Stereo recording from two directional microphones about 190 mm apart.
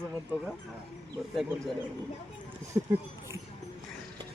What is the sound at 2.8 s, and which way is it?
Speech, 20° right (ahead or behind).